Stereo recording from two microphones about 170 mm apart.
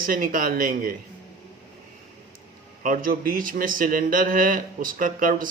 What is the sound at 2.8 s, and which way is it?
A man's voice, 55° right (ahead or behind).